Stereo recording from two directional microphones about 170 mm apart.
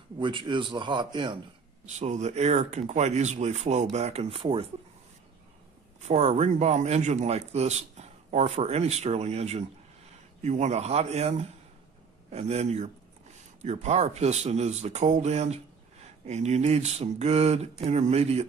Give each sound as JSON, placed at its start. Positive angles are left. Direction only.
{"t": 0.2, "sound": "a man's voice", "side_deg": -30}
{"t": 1.9, "sound": "speech", "side_deg": -45}
{"t": 6.0, "sound": "speech", "side_deg": -40}